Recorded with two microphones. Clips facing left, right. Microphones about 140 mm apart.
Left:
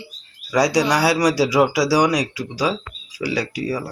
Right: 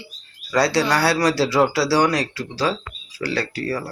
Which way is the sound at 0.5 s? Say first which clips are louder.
Left 1 dB; 15° left (ahead or behind).